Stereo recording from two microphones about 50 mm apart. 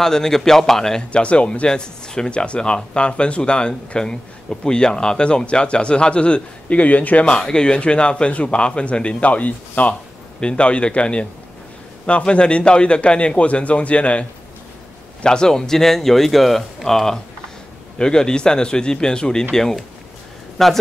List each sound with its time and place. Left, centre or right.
0.0 s speech: centre
1.1 s speech: left
7.3 s speech: centre
15.2 s speech: centre
20.6 s speech: centre